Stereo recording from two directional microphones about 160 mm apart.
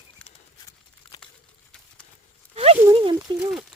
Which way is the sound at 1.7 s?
5° left (ahead or behind).